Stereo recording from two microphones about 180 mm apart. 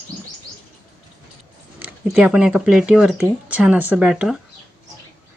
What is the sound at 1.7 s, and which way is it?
Speech, 5° right (ahead or behind).